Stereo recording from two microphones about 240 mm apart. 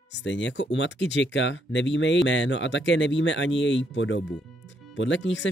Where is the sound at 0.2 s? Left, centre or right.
Left.